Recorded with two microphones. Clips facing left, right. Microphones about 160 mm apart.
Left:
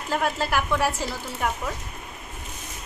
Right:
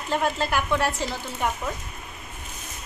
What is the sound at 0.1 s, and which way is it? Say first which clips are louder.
Speech: even; 5° left (ahead or behind).